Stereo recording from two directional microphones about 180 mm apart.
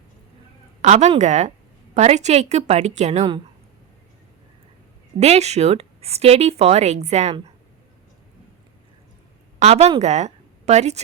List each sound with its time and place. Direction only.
0.8 s speech: 40° right (ahead or behind)
5.2 s speech: 35° right (ahead or behind)
9.6 s a woman's voice: 35° right (ahead or behind)